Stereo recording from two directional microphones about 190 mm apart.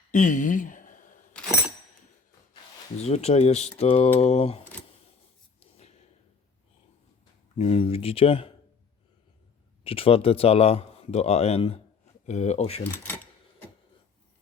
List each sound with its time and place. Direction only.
0.1 s a sound: 40° left (ahead or behind)
3.0 s speech: 35° left (ahead or behind)
5.5 s a sound: 35° left (ahead or behind)
7.6 s speech: 30° left (ahead or behind)
9.8 s speech: 30° left (ahead or behind)
12.8 s speech: 10° left (ahead or behind)